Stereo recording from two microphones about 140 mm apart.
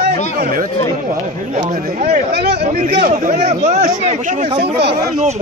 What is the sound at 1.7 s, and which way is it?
Speech, 85° right.